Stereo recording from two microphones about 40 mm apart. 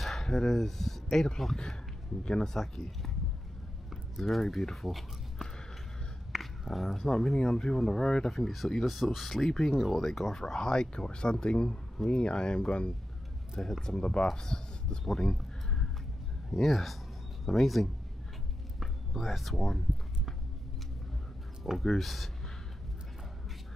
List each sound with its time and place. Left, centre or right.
0.0 s speech: centre
2.5 s speech: centre
6.3 s a sound: centre
6.7 s speech: centre
8.3 s speech: centre; by 12.9 s left
13.6 s speech: centre
13.9 s speech: left
16.4 s speech: centre
21.7 s speech: centre